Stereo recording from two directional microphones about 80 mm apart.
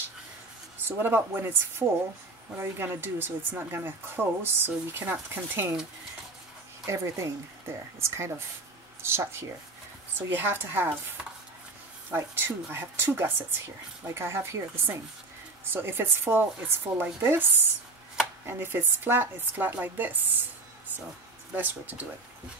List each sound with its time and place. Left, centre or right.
0.7 s speech: right
6.9 s speech: right
12.2 s speech: right
21.5 s speech: right